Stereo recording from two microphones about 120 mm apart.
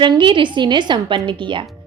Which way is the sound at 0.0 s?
40° right (ahead or behind).